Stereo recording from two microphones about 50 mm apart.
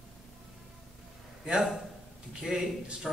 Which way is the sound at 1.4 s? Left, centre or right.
Centre.